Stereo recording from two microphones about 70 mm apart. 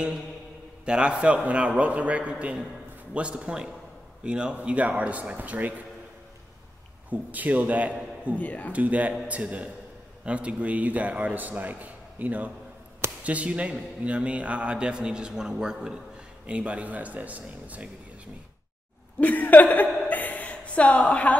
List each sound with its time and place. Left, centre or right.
0.8 s a man's voice: centre
7.1 s a man's voice: right
8.4 s speech: left
8.7 s a man's voice: right
19.1 s a woman's voice: left